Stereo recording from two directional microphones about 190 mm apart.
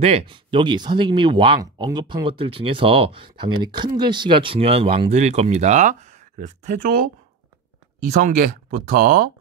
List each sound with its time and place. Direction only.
0.0 s speech: 30° right (ahead or behind); by 7.1 s 45° right (ahead or behind)
8.1 s speech: 45° right (ahead or behind)